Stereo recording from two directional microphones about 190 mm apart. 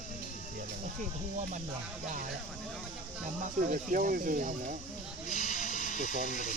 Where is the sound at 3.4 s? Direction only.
45° right (ahead or behind).